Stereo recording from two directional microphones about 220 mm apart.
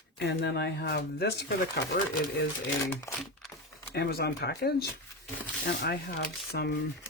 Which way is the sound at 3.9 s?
45° left (ahead or behind).